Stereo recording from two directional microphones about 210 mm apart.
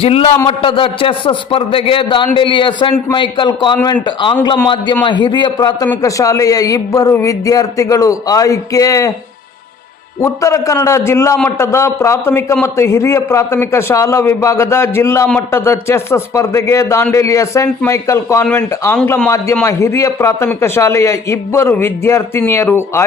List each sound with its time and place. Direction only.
0.0 s a man's voice: 25° left (ahead or behind)
5.0 s a man's voice: 20° left (ahead or behind)
10.2 s a man's voice: 15° left (ahead or behind)